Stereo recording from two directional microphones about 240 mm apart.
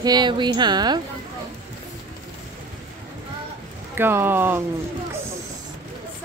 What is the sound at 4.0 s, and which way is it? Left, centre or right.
Speech, centre.